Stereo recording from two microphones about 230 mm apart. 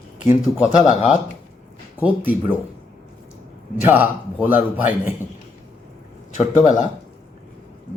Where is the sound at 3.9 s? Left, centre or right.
Centre.